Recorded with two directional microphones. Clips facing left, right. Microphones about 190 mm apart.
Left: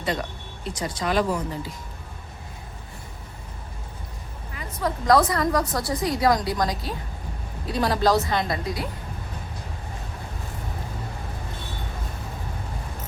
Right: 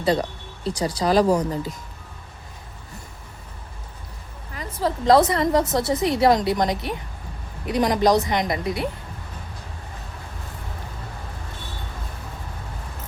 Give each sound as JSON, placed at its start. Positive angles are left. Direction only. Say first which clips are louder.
{"t": 0.0, "sound": "speech", "louder": "right 6 dB", "side_deg": -35}
{"t": 4.5, "sound": "a woman's voice", "louder": "right 3 dB", "side_deg": -25}